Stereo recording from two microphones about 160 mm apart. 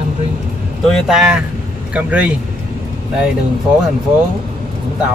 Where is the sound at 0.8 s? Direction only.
Centre (ahead or behind).